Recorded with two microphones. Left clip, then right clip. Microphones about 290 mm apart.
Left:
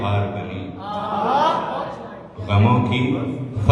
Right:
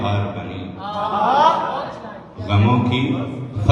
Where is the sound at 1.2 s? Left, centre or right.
Right.